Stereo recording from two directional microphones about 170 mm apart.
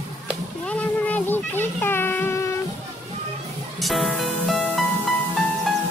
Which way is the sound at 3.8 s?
Centre (ahead or behind).